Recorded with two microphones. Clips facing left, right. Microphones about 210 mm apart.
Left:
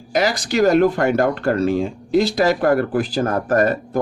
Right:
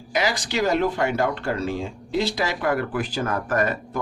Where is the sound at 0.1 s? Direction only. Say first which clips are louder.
Left 5 dB; 40° left (ahead or behind).